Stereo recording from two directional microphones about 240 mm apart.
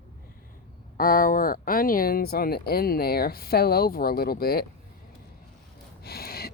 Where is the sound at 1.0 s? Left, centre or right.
Left.